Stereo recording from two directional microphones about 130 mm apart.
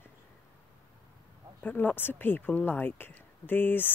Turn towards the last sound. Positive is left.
turn(degrees=15)  # may be behind; listen again after turning